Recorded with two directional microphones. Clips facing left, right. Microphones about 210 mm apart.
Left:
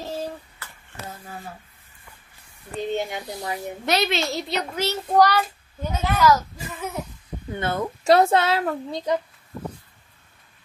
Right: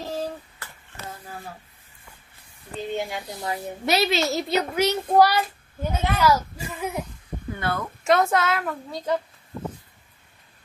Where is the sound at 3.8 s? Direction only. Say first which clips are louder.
Right 1 dB; 5° right (ahead or behind).